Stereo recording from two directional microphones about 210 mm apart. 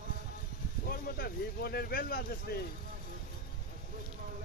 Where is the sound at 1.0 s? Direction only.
45° left (ahead or behind).